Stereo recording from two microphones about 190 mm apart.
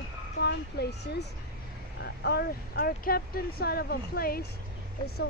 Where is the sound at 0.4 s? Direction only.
60° left (ahead or behind).